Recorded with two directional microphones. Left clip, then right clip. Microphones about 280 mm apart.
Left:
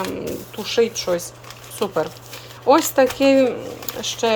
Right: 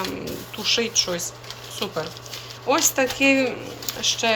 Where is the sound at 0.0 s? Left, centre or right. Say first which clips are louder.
Left 3 dB; centre.